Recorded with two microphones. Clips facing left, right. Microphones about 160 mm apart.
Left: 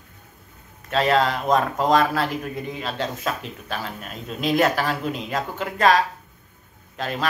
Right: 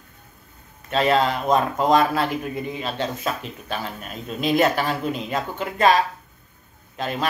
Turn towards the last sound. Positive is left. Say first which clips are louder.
# right 1 dB
turn(degrees=0)  # may be behind; listen again after turning